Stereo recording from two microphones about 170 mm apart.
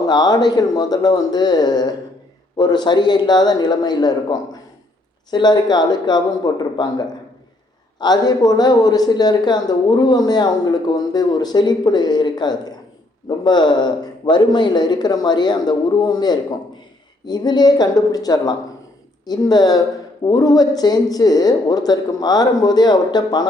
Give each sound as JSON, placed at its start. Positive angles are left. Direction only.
{"t": 0.0, "sound": "speech", "side_deg": 25}